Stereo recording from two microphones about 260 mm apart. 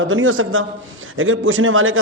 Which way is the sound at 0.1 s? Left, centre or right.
Right.